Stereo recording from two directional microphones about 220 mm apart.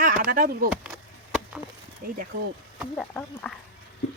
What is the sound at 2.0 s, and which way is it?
Speech, 40° right (ahead or behind).